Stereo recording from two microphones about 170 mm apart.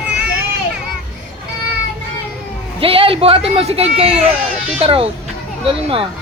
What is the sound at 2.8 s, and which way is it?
Speech, 30° right (ahead or behind).